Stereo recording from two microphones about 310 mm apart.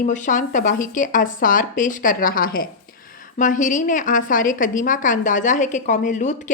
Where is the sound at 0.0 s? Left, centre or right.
Left.